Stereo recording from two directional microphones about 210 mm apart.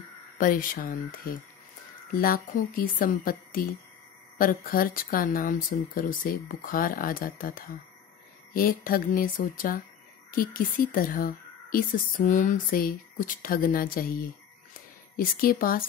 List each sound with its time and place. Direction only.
0.4 s speech: 40° left (ahead or behind)
15.1 s speech: 45° left (ahead or behind)